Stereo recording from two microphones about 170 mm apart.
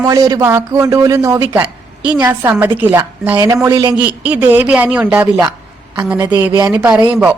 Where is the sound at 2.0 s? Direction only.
5° right (ahead or behind).